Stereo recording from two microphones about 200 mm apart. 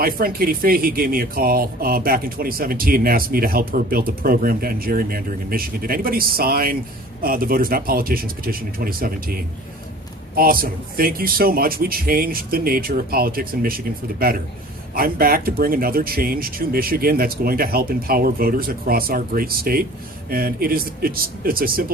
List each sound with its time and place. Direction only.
0.0 s speech: 50° right (ahead or behind)
10.3 s speech: 50° right (ahead or behind)